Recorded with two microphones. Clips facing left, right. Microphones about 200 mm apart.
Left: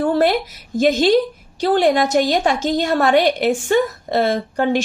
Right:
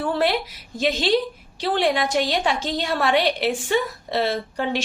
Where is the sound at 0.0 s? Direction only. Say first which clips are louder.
Left 6 dB; 45° left (ahead or behind).